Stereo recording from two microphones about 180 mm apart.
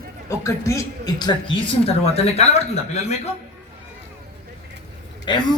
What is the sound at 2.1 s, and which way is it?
Speech, 35° left (ahead or behind).